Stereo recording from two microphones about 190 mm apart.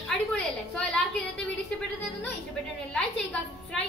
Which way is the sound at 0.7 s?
5° left (ahead or behind).